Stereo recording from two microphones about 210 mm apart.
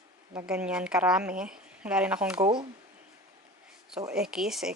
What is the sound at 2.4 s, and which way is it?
Speech, 20° right (ahead or behind).